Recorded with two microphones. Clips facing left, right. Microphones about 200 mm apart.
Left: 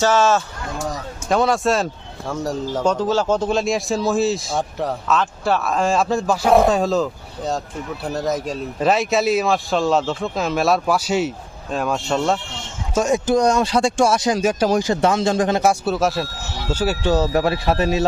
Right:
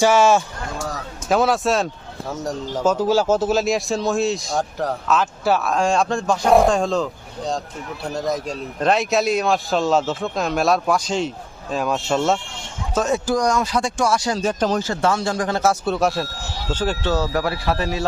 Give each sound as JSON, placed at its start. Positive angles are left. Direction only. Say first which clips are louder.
{"t": 0.0, "sound": "a man's voice", "louder": "right 2 dB", "side_deg": -10}
{"t": 12.9, "sound": "speech", "louder": "left 3 dB", "side_deg": 10}
{"t": 17.2, "sound": "speech", "louder": "left 3 dB", "side_deg": 25}